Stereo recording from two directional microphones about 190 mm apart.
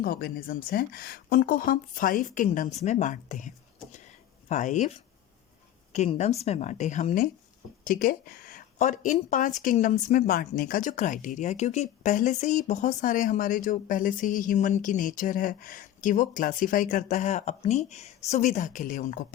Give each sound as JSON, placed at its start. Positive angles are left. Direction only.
{"t": 0.0, "sound": "speech", "side_deg": 55}